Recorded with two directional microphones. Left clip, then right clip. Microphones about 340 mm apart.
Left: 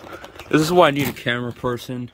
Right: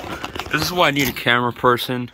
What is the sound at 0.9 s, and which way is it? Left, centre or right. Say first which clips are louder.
Speech: right 5 dB; centre.